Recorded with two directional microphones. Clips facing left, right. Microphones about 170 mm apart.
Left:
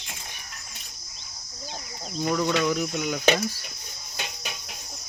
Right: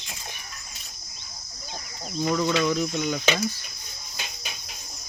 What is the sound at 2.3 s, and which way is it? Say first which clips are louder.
Speech: even; 5° left (ahead or behind).